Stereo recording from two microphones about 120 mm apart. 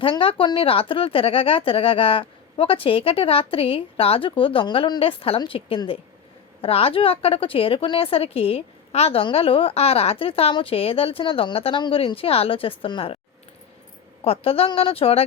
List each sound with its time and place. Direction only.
0.0 s a woman's voice: 50° left (ahead or behind)
14.3 s a woman's voice: 50° left (ahead or behind)